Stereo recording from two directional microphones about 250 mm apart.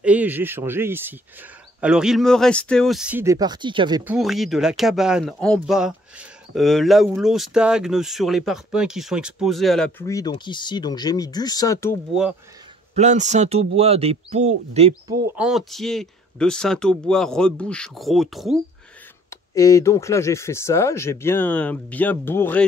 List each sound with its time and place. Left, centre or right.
0.0 s speech: centre
4.0 s speech: centre
12.1 s speech: centre
12.9 s speech: right
15.2 s speech: centre
19.5 s speech: centre